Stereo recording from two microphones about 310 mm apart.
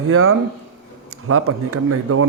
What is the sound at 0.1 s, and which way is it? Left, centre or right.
A man's voice, right.